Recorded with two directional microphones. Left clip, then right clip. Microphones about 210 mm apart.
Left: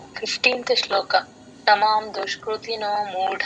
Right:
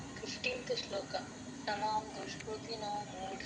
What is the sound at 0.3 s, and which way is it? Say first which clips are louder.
A woman's voice: left 18 dB; 45° left (ahead or behind).